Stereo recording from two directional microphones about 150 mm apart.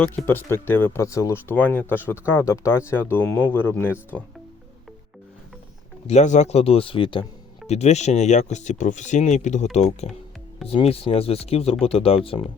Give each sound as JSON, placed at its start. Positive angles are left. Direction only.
{"t": 0.0, "sound": "speech", "side_deg": 10}
{"t": 6.1, "sound": "speech", "side_deg": 50}
{"t": 7.7, "sound": "speech", "side_deg": 50}